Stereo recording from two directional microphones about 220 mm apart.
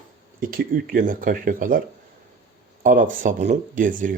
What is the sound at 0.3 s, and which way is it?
Speech, 40° right (ahead or behind).